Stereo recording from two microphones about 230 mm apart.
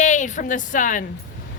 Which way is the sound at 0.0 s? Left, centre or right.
Left.